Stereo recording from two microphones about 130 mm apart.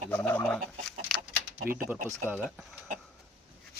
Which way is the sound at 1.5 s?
90° right.